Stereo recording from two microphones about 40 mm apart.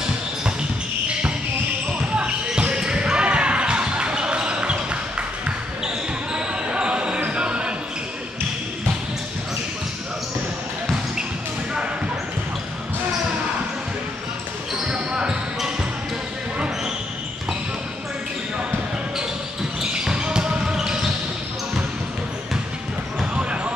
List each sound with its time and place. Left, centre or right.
2.1 s basketball bounce: right
6.3 s basketball bounce: right
7.2 s a sound: right
15.1 s basketball bounce: centre
19.9 s basketball bounce: right
23.3 s basketball bounce: right